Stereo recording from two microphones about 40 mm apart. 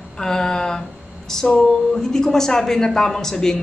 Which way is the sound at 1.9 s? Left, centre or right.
Centre.